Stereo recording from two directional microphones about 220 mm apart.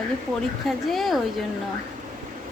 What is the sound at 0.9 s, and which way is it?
Speech, centre (ahead or behind).